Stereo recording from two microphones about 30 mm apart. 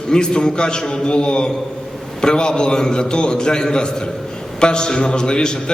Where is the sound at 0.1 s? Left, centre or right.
Left.